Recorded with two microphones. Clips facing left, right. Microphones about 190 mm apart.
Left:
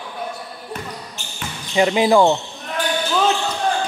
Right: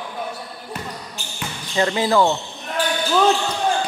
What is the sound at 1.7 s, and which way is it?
Speech, 15° left (ahead or behind).